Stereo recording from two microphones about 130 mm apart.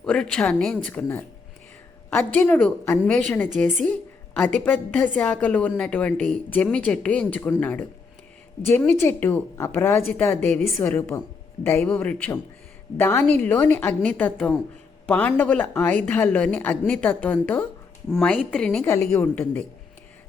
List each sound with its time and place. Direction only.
0.0 s a woman's voice: 5° left (ahead or behind)
18.8 s a woman's voice: 20° left (ahead or behind)